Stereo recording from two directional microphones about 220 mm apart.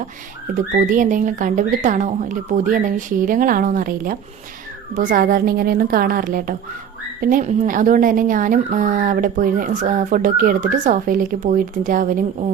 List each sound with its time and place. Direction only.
0.5 s speech: 35° right (ahead or behind)